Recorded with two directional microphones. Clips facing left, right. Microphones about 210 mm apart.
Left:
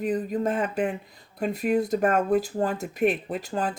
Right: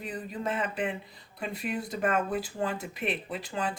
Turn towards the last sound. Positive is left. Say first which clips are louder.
# left 5 dB
turn(degrees=45)  # may be behind; listen again after turning